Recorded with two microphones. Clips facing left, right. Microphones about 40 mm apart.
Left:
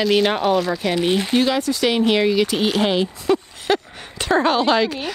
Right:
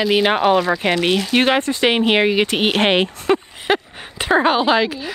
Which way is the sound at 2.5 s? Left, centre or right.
Right.